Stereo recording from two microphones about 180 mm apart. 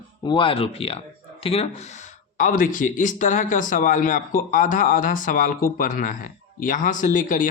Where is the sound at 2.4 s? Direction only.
50° left (ahead or behind).